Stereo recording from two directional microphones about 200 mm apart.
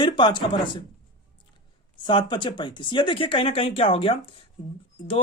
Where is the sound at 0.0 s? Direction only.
25° left (ahead or behind).